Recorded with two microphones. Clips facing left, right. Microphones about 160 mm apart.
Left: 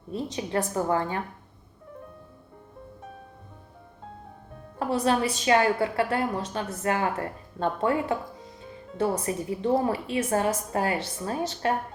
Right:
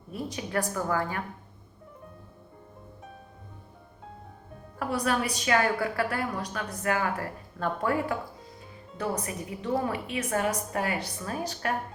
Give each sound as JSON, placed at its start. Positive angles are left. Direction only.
{"t": 0.1, "sound": "a woman's voice", "side_deg": 25}
{"t": 4.8, "sound": "a woman's voice", "side_deg": 25}